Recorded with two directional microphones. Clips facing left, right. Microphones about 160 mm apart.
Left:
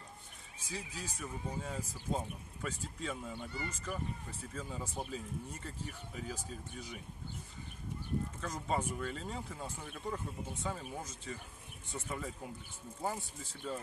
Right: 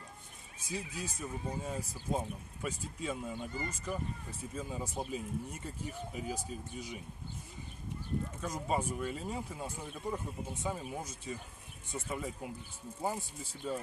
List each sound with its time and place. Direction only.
0.7 s speech: 15° right (ahead or behind)
8.4 s speech: 10° right (ahead or behind)